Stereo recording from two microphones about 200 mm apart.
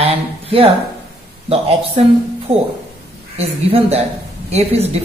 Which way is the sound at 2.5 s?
30° right (ahead or behind).